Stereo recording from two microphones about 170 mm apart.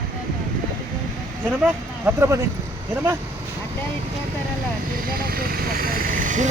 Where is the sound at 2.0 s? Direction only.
15° right (ahead or behind).